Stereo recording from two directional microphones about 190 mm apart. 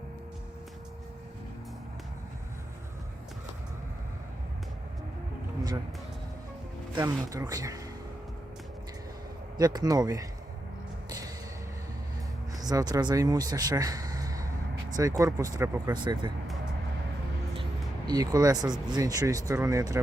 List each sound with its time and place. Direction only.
6.9 s speech: 20° right (ahead or behind)
9.6 s speech: 20° right (ahead or behind)
12.5 s speech: 20° right (ahead or behind)
18.1 s speech: 20° right (ahead or behind)